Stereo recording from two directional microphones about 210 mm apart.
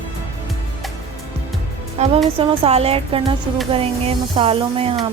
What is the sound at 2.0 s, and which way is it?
A woman's voice, 30° right (ahead or behind).